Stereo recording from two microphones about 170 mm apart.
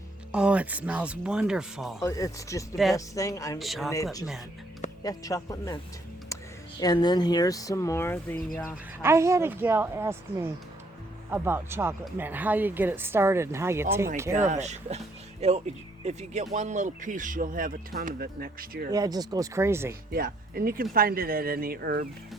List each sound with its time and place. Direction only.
0.3 s speech: 5° right (ahead or behind)
2.0 s a man's voice: 20° left (ahead or behind)
3.6 s speech: centre (ahead or behind)
3.9 s a man's voice: 20° left (ahead or behind)
9.0 s speech: 15° right (ahead or behind)
14.3 s speech: 45° right (ahead or behind); by 18.9 s 60° right (ahead or behind)
18.9 s speech: 20° right (ahead or behind)
20.1 s speech: 60° right (ahead or behind)